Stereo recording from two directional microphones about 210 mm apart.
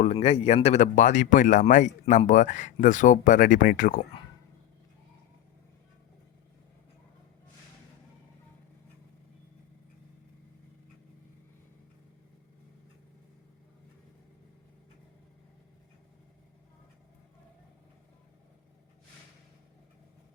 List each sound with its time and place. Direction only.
0.0 s speech: 30° left (ahead or behind)